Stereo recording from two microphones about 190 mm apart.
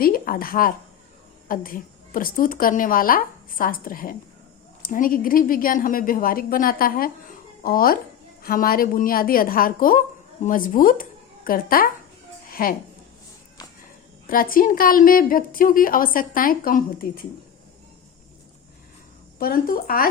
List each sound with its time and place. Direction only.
0.0 s a woman's voice: 50° left (ahead or behind)
12.5 s music: 50° left (ahead or behind)
14.3 s a woman's voice: 50° left (ahead or behind)
19.4 s a woman's voice: 50° left (ahead or behind)